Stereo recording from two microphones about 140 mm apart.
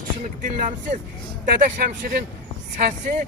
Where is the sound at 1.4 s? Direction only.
90° right.